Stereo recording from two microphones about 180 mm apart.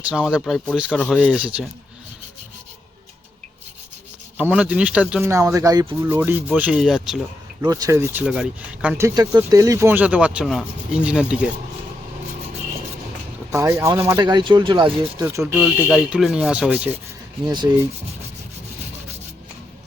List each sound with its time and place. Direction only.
0.1 s speech: 5° right (ahead or behind)
1.2 s speech: 5° right (ahead or behind)
4.4 s speech: 5° right (ahead or behind)
7.6 s speech: 20° right (ahead or behind)
9.0 s speech: 15° right (ahead or behind)
13.5 s speech: 15° right (ahead or behind)
15.2 s speech: 15° right (ahead or behind)
15.6 s speech: centre (ahead or behind)
17.4 s speech: 25° right (ahead or behind)